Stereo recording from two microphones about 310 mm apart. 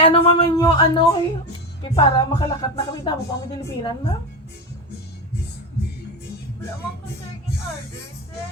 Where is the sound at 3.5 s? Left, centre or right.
Centre.